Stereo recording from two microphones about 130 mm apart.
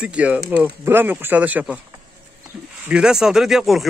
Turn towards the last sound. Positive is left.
turn(degrees=0)  # may be behind; listen again after turning